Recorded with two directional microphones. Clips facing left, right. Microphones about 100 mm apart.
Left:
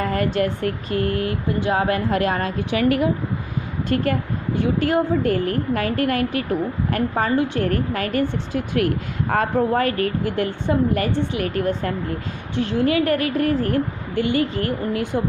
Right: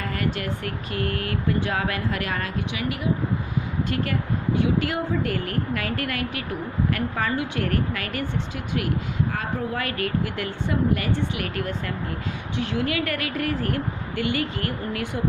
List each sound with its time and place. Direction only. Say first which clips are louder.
0.0 s a woman's voice: left 7 dB; 35° left (ahead or behind)
1.8 s a woman's voice: left 7 dB; 35° left (ahead or behind)
2.7 s speech: left 13 dB; 50° left (ahead or behind)
3.8 s a woman's voice: left 5 dB; 40° left (ahead or behind)
9.3 s a woman's voice: left 9 dB; 50° left (ahead or behind); by 15.2 s 25° left (ahead or behind)